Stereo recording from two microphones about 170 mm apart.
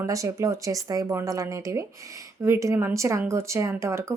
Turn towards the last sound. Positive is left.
turn(degrees=-15)  # may be behind; listen again after turning